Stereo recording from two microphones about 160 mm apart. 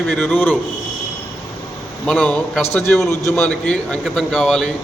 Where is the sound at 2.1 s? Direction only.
10° left (ahead or behind).